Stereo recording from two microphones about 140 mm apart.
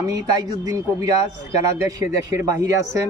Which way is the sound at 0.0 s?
25° right (ahead or behind).